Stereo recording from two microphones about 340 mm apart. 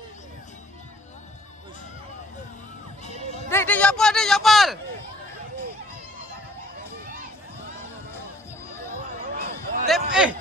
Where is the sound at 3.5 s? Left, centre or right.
Centre.